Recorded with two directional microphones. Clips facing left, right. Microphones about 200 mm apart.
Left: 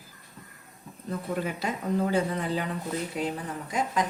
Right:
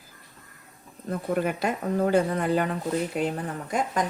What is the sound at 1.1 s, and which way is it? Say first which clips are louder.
Speech: right 4 dB; 55° right (ahead or behind).